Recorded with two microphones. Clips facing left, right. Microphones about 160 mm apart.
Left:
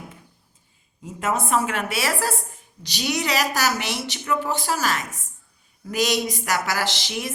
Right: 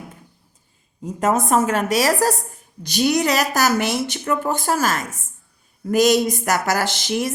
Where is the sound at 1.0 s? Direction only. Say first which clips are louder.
Right 6 dB; 45° right (ahead or behind).